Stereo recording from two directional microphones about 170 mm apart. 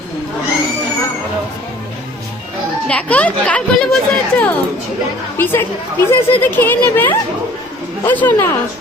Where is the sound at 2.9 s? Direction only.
10° left (ahead or behind).